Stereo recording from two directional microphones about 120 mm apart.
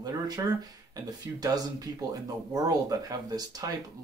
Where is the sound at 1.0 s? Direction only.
35° right (ahead or behind).